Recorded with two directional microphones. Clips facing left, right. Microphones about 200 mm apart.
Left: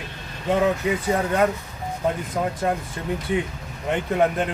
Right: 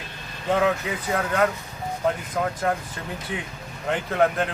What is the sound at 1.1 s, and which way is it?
A man's voice, 20° left (ahead or behind).